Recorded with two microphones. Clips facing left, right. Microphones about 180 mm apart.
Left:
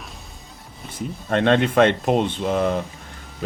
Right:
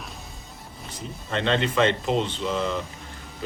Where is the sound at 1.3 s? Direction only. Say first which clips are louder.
Left 6 dB; 55° left (ahead or behind).